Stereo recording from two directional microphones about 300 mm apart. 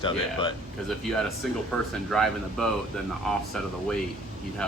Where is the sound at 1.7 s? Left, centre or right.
Centre.